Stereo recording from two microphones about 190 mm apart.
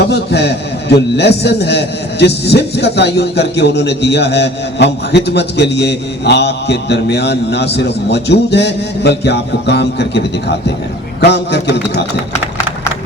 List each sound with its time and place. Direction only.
0.1 s a man's voice: 60° left (ahead or behind)